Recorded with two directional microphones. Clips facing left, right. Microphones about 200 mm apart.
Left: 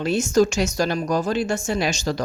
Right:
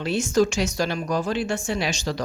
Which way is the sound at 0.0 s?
45° left (ahead or behind).